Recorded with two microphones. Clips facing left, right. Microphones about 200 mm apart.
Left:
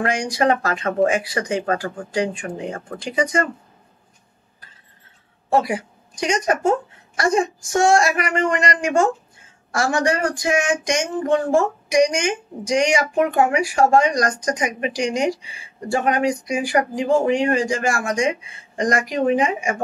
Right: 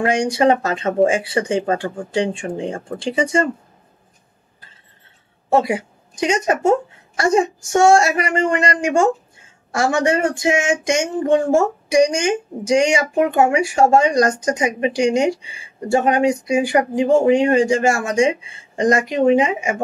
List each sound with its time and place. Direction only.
0.0 s speech: 25° right (ahead or behind)
5.5 s speech: 25° right (ahead or behind)